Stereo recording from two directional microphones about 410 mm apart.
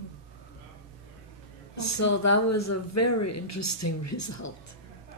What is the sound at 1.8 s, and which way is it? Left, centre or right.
Speech, left.